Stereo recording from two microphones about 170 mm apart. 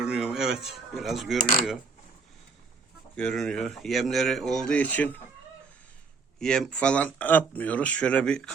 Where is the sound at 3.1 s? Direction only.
5° left (ahead or behind).